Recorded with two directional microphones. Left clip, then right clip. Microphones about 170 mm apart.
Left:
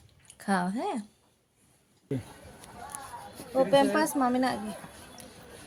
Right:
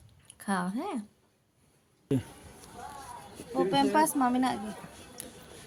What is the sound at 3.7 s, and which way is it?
Speech, 15° right (ahead or behind).